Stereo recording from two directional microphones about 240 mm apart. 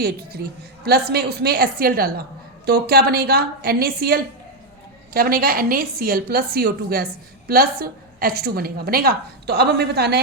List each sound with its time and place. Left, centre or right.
0.0 s a woman's voice: right